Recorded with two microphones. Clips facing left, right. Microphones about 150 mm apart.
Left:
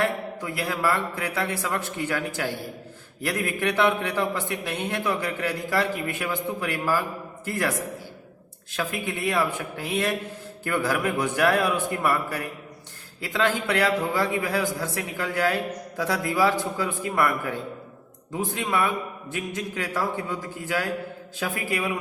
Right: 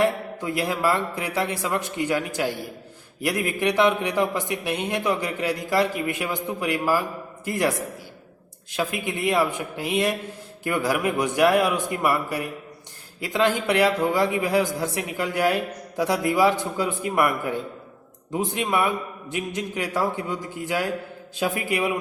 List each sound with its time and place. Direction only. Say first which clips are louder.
0.0 s a man's voice: right 4 dB; 20° right (ahead or behind)
8.7 s a man's voice: right 2 dB; 15° right (ahead or behind)